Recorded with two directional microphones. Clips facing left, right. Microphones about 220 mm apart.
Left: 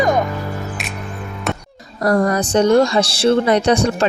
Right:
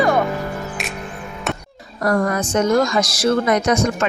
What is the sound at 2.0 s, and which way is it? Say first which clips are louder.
Speech: left 3 dB; 35° left (ahead or behind).